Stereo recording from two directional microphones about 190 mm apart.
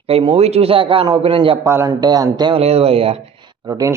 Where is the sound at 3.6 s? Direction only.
20° right (ahead or behind).